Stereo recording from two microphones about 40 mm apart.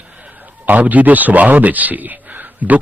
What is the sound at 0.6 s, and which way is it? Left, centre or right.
Speech, right.